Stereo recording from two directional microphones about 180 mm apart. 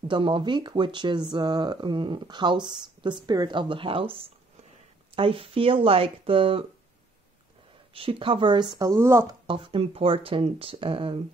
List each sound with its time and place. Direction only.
0.1 s speech: 25° right (ahead or behind)
7.9 s speech: 30° right (ahead or behind); by 9.4 s 15° right (ahead or behind)
9.5 s speech: 30° right (ahead or behind)